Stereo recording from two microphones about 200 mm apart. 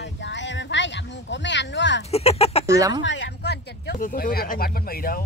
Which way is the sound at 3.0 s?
65° left (ahead or behind).